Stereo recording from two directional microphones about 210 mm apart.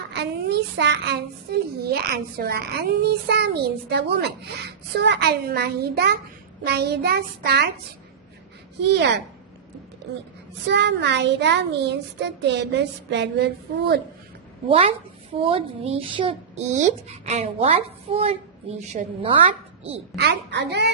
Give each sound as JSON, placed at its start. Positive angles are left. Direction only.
{"t": 0.1, "sound": "a child's voice", "side_deg": -55}
{"t": 8.8, "sound": "a child's voice", "side_deg": -55}
{"t": 10.7, "sound": "a child's voice", "side_deg": -55}
{"t": 14.7, "sound": "a child's voice", "side_deg": -25}
{"t": 20.1, "sound": "a child's voice", "side_deg": -55}